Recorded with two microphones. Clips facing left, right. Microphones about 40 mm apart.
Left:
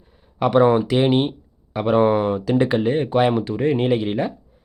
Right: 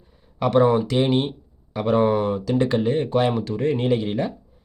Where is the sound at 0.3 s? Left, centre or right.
Centre.